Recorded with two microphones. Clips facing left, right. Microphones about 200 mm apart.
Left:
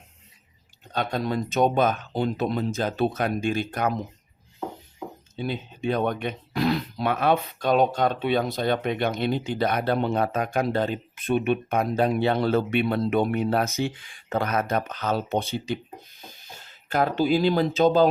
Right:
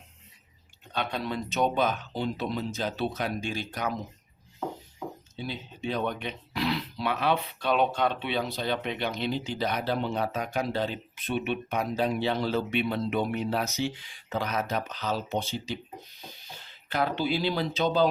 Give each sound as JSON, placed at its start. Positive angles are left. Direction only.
{"t": 0.9, "sound": "speech", "side_deg": 45}
{"t": 5.4, "sound": "speech", "side_deg": 55}
{"t": 16.5, "sound": "speech", "side_deg": 45}